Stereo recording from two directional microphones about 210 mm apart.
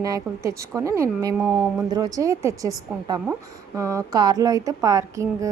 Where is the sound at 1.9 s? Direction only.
15° right (ahead or behind).